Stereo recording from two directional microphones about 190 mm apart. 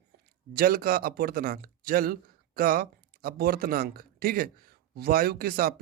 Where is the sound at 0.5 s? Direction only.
50° right (ahead or behind).